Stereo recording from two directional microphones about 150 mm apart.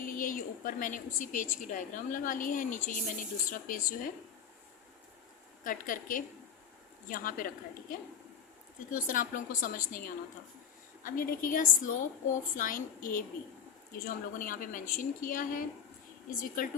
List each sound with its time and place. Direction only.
0.0 s a woman's voice: 65° left (ahead or behind)
5.6 s a woman's voice: 65° left (ahead or behind)
14.3 s a woman's voice: 65° left (ahead or behind)